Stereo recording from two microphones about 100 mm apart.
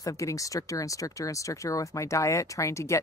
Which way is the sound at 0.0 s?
35° left (ahead or behind).